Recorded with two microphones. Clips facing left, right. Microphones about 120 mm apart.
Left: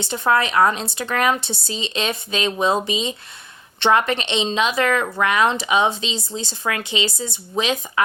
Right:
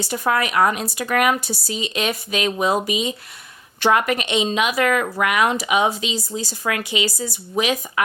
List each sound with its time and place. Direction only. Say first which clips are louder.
0.0 s a woman's voice: left 2 dB; 25° left (ahead or behind)